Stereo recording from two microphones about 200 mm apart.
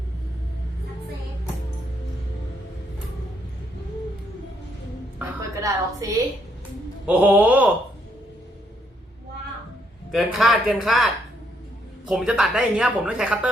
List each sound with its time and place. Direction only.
5.2 s a sound: 15° right (ahead or behind)
7.1 s groan: 10° right (ahead or behind)
10.1 s speech: centre (ahead or behind)